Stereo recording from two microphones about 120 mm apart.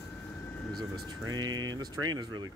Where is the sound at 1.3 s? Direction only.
35° right (ahead or behind).